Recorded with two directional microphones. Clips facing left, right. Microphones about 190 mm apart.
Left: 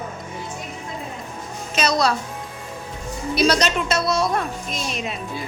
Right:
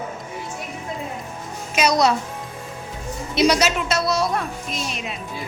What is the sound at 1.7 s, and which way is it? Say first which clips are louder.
Speech: right 2 dB; 15° right (ahead or behind).